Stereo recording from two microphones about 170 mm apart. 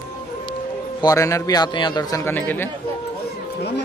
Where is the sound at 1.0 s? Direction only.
20° left (ahead or behind).